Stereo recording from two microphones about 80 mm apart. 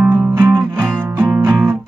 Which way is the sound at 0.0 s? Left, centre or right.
Right.